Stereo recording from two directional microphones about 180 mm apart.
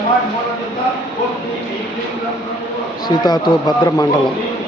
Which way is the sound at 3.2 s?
20° left (ahead or behind).